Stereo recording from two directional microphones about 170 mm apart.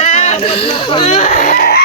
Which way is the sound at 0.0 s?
40° left (ahead or behind).